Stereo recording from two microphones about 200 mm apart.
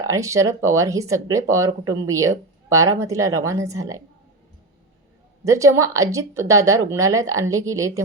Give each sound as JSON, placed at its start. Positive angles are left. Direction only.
{"t": 0.1, "sound": "a woman's voice", "side_deg": -15}
{"t": 5.5, "sound": "a woman's voice", "side_deg": -15}